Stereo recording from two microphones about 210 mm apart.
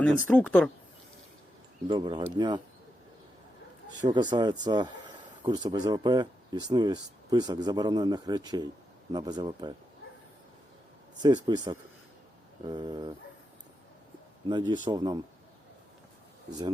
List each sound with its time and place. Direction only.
0.0 s speech: 5° left (ahead or behind)
1.9 s speech: 20° right (ahead or behind)
4.1 s speech: 20° right (ahead or behind)
11.2 s speech: 20° right (ahead or behind)
14.7 s speech: 20° right (ahead or behind)
16.5 s speech: 20° right (ahead or behind)